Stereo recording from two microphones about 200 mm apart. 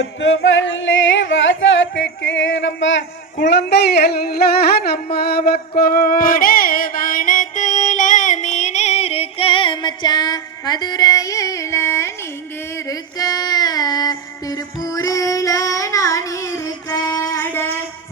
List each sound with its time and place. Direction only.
0.0 s music: 65° left (ahead or behind)
3.3 s a sound: 60° left (ahead or behind); by 12.1 s 15° left (ahead or behind)
12.9 s female singing: 20° left (ahead or behind)